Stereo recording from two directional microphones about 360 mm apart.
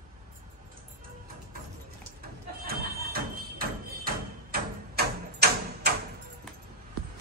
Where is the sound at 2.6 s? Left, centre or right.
Right.